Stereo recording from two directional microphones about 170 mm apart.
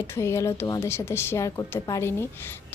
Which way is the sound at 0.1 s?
15° left (ahead or behind).